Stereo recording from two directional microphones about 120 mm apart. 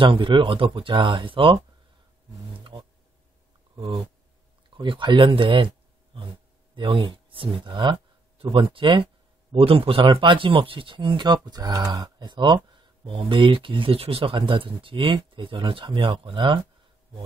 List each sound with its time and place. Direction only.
0.0 s speech: 45° right (ahead or behind)
2.7 s a sound: 40° right (ahead or behind)
3.7 s speech: 40° right (ahead or behind)
6.7 s speech: 45° right (ahead or behind)